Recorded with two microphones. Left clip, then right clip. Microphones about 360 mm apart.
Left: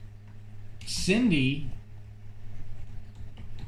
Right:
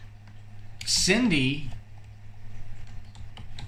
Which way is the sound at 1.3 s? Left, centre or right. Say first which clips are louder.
Right 2 dB; centre.